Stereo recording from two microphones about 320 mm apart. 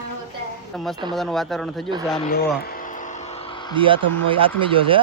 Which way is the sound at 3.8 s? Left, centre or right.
Centre.